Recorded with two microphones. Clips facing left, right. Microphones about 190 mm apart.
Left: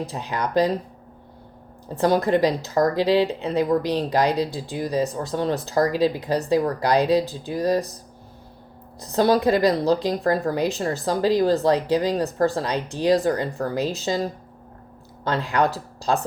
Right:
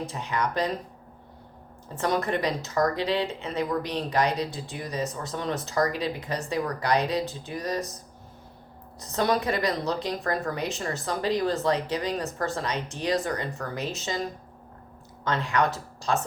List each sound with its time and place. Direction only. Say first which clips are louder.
0.0 s speech: left 2 dB; 35° left (ahead or behind)
2.0 s speech: left 8 dB; 35° left (ahead or behind)
9.0 s speech: left 6 dB; 35° left (ahead or behind)